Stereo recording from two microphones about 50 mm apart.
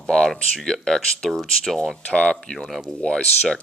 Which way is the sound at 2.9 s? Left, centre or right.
Centre.